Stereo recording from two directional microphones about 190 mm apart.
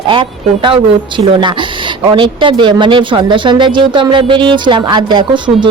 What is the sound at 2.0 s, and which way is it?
A woman's voice, 25° right (ahead or behind).